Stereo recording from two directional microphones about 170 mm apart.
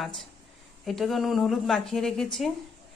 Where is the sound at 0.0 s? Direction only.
Centre (ahead or behind).